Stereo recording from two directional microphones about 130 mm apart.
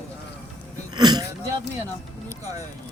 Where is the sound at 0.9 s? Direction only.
35° right (ahead or behind).